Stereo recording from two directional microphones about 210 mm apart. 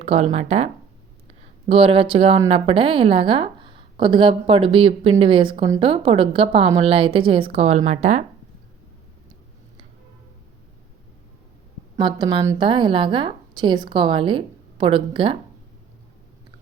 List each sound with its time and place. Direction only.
0.0 s a woman's voice: 30° right (ahead or behind)
11.9 s a woman's voice: 20° right (ahead or behind)